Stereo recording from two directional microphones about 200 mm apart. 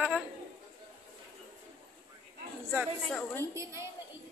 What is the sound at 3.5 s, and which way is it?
Speech, 15° right (ahead or behind).